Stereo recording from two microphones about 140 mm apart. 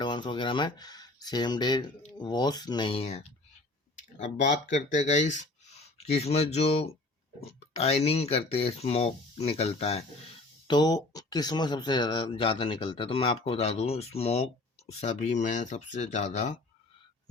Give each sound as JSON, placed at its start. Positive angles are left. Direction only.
{"t": 0.0, "sound": "speech", "side_deg": 35}
{"t": 4.2, "sound": "speech", "side_deg": 60}
{"t": 6.1, "sound": "speech", "side_deg": 50}
{"t": 10.7, "sound": "speech", "side_deg": 30}